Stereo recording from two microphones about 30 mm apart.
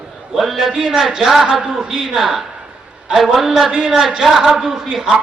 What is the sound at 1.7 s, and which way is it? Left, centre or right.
A man's voice, centre.